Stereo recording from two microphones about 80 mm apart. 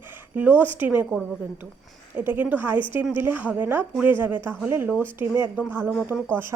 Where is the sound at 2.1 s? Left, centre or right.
Right.